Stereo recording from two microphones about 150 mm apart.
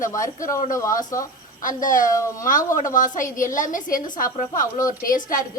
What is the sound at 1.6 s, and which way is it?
A woman's voice, 60° left (ahead or behind).